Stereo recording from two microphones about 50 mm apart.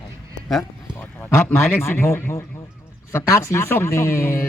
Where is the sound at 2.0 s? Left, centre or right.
Left.